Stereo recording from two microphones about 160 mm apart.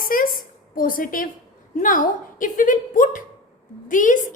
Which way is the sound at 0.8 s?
60° left (ahead or behind).